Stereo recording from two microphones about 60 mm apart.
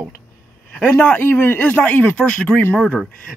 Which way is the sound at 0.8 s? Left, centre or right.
Left.